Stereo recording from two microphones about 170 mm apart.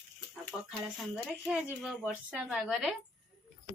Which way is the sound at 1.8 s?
5° right (ahead or behind).